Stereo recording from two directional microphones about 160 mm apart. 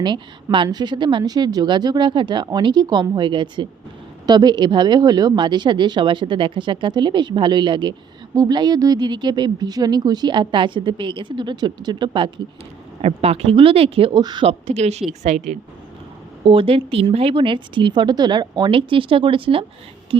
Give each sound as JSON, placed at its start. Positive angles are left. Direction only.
{"t": 0.0, "sound": "speech", "side_deg": -30}
{"t": 14.4, "sound": "speech", "side_deg": -40}